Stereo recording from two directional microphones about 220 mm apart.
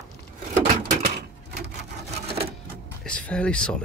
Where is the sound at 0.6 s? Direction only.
45° right (ahead or behind).